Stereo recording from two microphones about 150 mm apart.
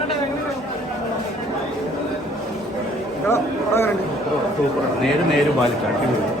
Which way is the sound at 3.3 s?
15° left (ahead or behind).